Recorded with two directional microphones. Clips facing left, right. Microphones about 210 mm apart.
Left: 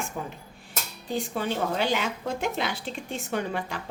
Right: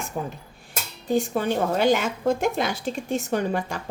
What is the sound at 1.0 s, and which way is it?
Speech, 45° right (ahead or behind).